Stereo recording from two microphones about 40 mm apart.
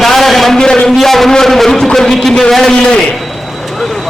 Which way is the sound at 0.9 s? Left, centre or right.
Centre.